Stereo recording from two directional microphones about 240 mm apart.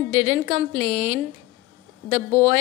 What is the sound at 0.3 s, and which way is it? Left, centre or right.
Speech, right.